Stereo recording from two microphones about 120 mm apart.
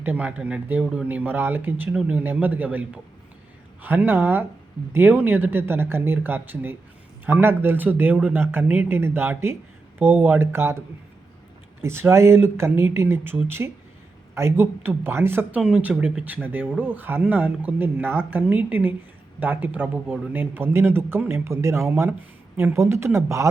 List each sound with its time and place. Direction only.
0.0 s speech: 15° right (ahead or behind)